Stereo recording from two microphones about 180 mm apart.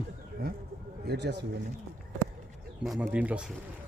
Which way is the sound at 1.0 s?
65° right (ahead or behind).